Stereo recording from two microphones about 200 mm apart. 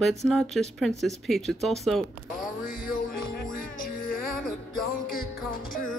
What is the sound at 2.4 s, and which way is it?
Music, 45° left (ahead or behind).